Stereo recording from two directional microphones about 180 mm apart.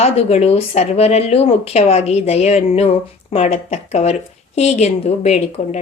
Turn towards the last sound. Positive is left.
turn(degrees=35)  # may be behind; listen again after turning